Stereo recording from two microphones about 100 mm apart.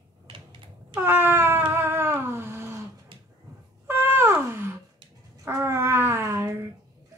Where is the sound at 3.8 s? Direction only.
25° right (ahead or behind).